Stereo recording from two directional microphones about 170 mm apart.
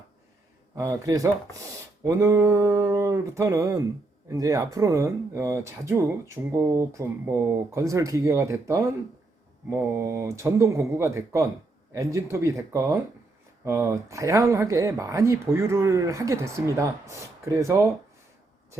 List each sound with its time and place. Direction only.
0.8 s chopping: 20° right (ahead or behind)
2.0 s speech: 20° right (ahead or behind)